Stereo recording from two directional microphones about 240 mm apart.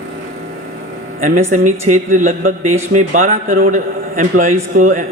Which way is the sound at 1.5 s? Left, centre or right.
Right.